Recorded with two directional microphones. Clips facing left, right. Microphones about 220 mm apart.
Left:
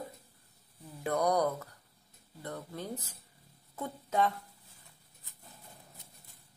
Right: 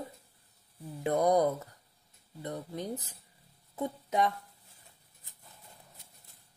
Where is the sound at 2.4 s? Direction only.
15° right (ahead or behind).